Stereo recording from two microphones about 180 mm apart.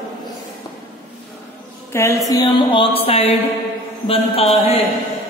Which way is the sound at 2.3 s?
25° left (ahead or behind).